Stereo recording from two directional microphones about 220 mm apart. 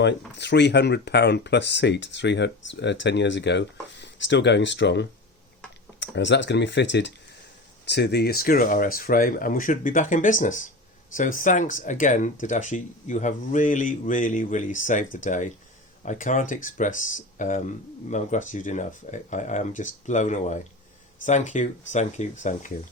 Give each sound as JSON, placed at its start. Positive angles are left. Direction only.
{"t": 0.3, "sound": "speech", "side_deg": 50}